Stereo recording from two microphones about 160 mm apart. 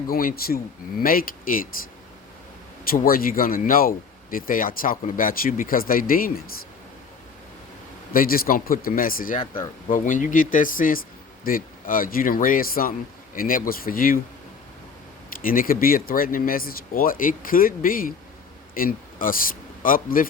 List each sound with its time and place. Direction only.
0.1 s speech: 65° left (ahead or behind)
2.9 s speech: 65° left (ahead or behind)
8.1 s speech: 65° left (ahead or behind)
15.3 s speech: 60° left (ahead or behind)